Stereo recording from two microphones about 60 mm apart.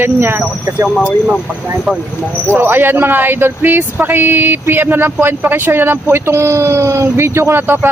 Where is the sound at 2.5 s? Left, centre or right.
Right.